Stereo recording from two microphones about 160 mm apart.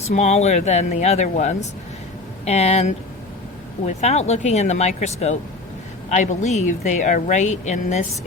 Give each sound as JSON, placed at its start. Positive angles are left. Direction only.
{"t": 0.1, "sound": "speech", "side_deg": 45}